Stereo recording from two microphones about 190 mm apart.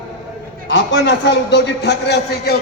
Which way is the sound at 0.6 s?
70° left (ahead or behind).